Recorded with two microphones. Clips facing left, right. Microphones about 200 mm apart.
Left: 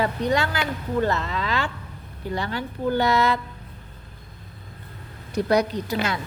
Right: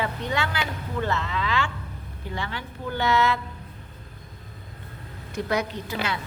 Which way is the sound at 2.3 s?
40° left (ahead or behind).